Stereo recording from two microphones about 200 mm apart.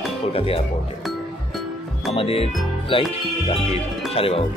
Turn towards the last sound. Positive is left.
turn(degrees=30)  # may be behind; listen again after turning